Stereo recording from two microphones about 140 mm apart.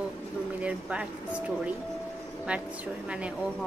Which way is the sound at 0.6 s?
10° right (ahead or behind).